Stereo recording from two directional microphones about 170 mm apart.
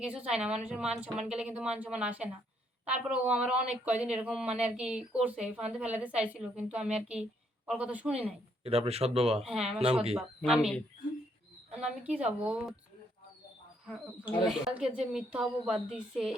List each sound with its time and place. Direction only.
0.0 s a woman's voice: 5° right (ahead or behind)
8.6 s speech: 35° right (ahead or behind)
9.5 s a woman's voice: 5° right (ahead or behind)
12.0 s speech: 5° right (ahead or behind)
14.4 s a woman's voice: 5° right (ahead or behind)